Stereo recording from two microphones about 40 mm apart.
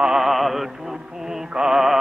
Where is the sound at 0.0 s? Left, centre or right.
Centre.